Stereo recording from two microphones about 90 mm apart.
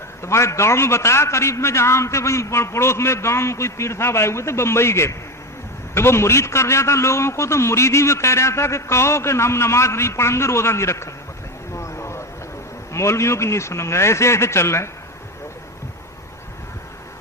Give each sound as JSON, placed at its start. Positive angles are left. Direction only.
{"t": 0.2, "sound": "a man's voice", "side_deg": 30}
{"t": 11.7, "sound": "a sound", "side_deg": 30}
{"t": 12.9, "sound": "a man's voice", "side_deg": 30}